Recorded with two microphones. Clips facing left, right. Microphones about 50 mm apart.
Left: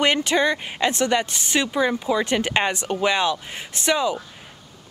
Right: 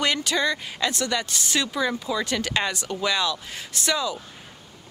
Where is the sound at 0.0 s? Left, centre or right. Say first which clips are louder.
Left 4 dB; left.